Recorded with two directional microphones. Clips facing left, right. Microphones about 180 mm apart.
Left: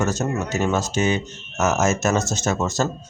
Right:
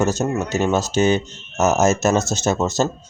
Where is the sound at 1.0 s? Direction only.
30° right (ahead or behind).